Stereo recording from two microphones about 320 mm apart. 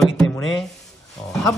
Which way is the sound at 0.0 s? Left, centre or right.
Centre.